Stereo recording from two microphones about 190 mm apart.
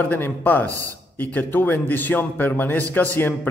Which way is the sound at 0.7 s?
15° right (ahead or behind).